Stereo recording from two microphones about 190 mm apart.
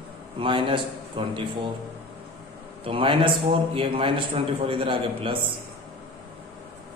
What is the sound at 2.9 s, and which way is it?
A man's voice, 30° right (ahead or behind).